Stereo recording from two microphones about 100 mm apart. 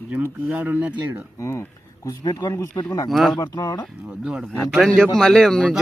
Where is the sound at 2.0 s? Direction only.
40° left (ahead or behind).